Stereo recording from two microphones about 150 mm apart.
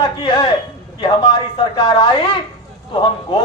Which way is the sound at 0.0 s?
35° left (ahead or behind).